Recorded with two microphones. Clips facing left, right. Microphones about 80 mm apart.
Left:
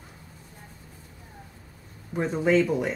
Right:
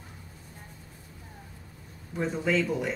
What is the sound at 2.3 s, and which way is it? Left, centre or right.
Speech, left.